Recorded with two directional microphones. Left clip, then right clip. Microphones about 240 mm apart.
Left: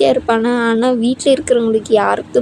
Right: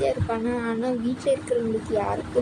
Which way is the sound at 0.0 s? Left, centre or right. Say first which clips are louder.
Left 12 dB; left.